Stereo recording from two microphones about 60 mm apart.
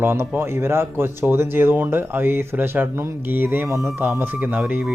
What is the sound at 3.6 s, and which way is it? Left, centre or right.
Speech, right.